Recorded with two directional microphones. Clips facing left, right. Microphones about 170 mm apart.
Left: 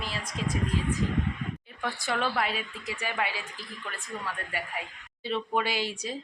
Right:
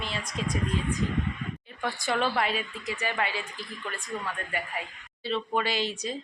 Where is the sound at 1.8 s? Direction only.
Centre (ahead or behind).